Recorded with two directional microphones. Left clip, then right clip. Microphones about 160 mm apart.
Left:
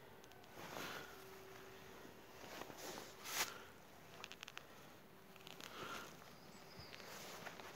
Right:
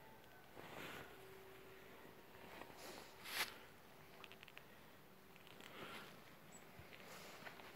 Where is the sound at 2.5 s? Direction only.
30° left (ahead or behind).